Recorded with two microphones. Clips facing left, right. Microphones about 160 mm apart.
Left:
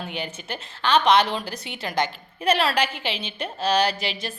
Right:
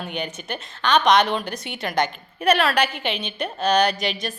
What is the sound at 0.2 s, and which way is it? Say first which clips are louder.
A woman's voice: right 2 dB; 30° left (ahead or behind).